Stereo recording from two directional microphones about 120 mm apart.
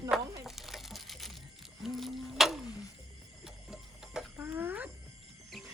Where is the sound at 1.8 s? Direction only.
Centre (ahead or behind).